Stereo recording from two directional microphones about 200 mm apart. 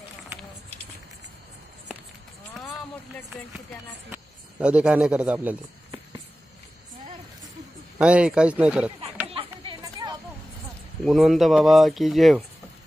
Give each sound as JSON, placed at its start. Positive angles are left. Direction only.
{"t": 2.5, "sound": "vehicle", "side_deg": 0}
{"t": 4.1, "sound": "speech", "side_deg": -5}
{"t": 8.0, "sound": "speech", "side_deg": -5}
{"t": 9.3, "sound": "chatter", "side_deg": -25}
{"t": 11.1, "sound": "speech", "side_deg": 0}